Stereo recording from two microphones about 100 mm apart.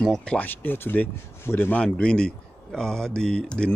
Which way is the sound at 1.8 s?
10° left (ahead or behind).